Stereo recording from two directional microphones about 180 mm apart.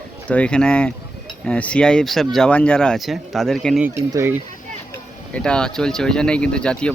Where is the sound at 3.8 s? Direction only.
15° right (ahead or behind).